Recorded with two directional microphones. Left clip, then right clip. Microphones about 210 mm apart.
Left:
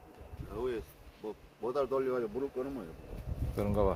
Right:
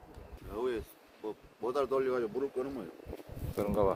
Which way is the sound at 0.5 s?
40° right (ahead or behind).